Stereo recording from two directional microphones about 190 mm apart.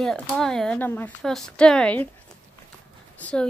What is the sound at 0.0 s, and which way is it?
Speech, 5° left (ahead or behind).